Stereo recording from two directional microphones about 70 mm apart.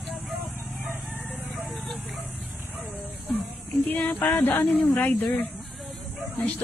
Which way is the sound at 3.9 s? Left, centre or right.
Left.